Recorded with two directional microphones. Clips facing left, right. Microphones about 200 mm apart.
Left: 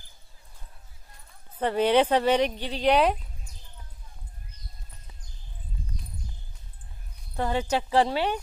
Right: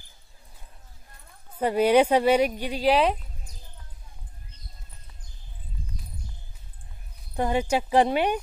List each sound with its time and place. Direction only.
1.6 s speech: 10° right (ahead or behind)
7.3 s speech: 15° right (ahead or behind)